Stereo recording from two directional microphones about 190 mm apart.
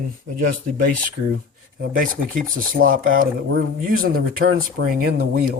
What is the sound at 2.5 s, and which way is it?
Speech, 50° right (ahead or behind).